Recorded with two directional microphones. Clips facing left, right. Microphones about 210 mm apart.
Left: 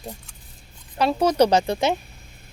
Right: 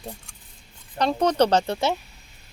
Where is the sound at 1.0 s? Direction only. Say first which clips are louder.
Left 2 dB; 10° left (ahead or behind).